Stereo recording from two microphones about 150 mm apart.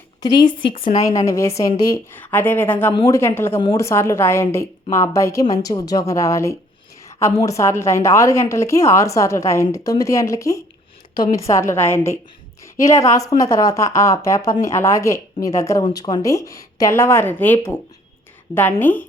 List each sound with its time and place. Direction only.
0.2 s a woman's voice: 25° left (ahead or behind)
2.1 s a woman's voice: 15° left (ahead or behind)